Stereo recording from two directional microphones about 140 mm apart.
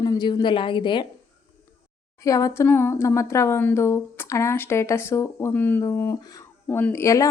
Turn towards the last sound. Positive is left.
turn(degrees=20)  # may be behind; listen again after turning